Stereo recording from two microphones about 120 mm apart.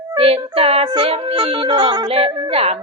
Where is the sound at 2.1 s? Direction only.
55° right (ahead or behind).